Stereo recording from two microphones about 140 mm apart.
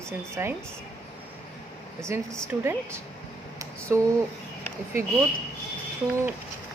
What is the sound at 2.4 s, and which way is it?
Speech, 20° right (ahead or behind).